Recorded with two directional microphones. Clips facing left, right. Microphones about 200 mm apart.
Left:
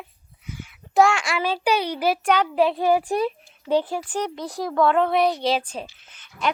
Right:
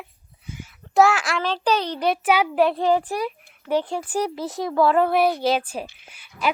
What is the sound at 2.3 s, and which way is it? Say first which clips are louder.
Speech: right 1 dB; 10° right (ahead or behind).